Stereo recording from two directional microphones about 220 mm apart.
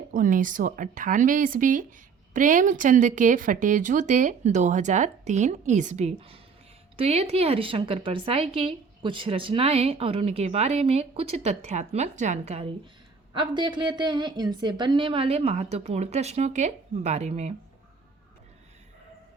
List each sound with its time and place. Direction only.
0.1 s a woman's voice: 40° right (ahead or behind)